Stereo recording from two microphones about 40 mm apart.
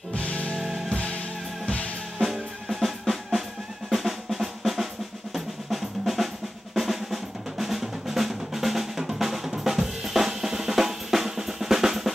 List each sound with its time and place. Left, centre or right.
0.1 s music: left
0.6 s music: centre
0.8 s music: left
2.1 s drum kit: centre
3.9 s drum: centre